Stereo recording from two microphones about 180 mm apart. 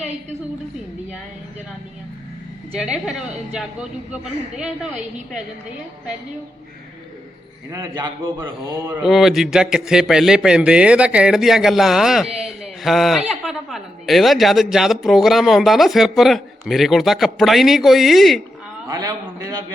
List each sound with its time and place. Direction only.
2.7 s speech: 5° right (ahead or behind)
7.7 s a man's voice: 20° right (ahead or behind)
9.0 s speech: centre (ahead or behind)
18.9 s a man's voice: 20° right (ahead or behind)